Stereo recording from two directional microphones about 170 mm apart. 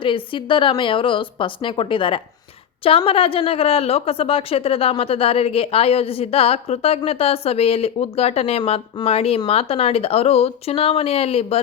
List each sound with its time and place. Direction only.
0.0 s speech: 30° left (ahead or behind)